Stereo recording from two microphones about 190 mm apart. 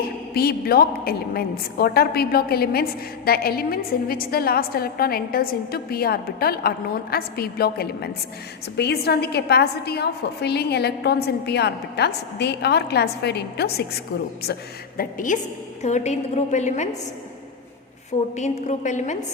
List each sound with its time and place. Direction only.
0.3 s a woman's voice: 55° left (ahead or behind)
14.9 s a woman's voice: 45° left (ahead or behind)
18.3 s a woman's voice: 40° left (ahead or behind)